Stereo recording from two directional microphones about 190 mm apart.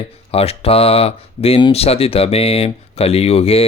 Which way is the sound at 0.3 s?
30° left (ahead or behind).